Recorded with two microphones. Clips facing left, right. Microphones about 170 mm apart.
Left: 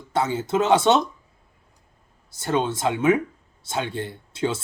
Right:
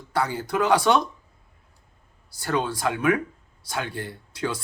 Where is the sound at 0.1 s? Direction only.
25° left (ahead or behind).